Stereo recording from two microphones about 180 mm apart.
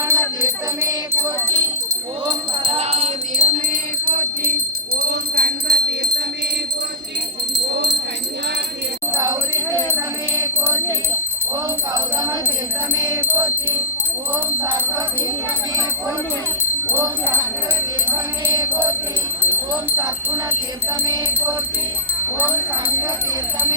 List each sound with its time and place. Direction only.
0.0 s music: 15° right (ahead or behind)
2.7 s music: 35° right (ahead or behind); by 4.5 s 55° right (ahead or behind)
4.9 s jingle bell: 65° right (ahead or behind)
9.1 s speech: 20° right (ahead or behind)
10.3 s music: 15° right (ahead or behind)
11.9 s speech: 20° right (ahead or behind)
16.9 s speech: 15° right (ahead or behind)
18.5 s speech: 10° right (ahead or behind)
20.0 s speech: 10° right (ahead or behind)